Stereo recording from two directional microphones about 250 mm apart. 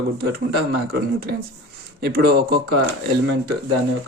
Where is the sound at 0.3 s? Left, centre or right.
Right.